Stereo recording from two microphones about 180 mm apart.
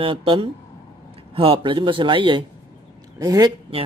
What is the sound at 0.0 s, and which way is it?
Speech, 30° right (ahead or behind).